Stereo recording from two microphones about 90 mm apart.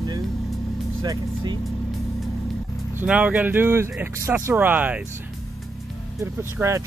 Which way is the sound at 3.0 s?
15° right (ahead or behind).